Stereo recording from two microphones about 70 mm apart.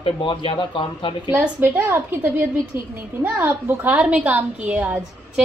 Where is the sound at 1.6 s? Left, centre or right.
Right.